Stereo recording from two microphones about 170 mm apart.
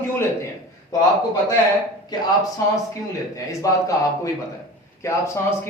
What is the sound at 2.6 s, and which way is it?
A man's voice, 15° left (ahead or behind).